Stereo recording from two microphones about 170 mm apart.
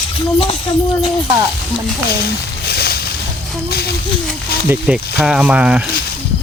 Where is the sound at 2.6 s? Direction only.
70° left (ahead or behind).